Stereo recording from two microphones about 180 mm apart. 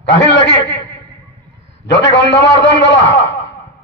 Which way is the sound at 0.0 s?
75° left (ahead or behind).